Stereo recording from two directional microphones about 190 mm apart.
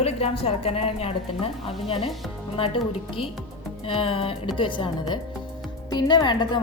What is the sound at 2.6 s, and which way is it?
Speech, 30° left (ahead or behind).